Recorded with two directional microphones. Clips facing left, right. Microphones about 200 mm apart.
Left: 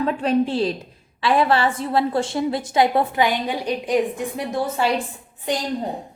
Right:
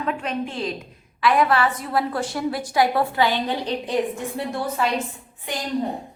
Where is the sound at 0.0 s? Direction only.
35° left (ahead or behind); by 3.9 s 10° left (ahead or behind).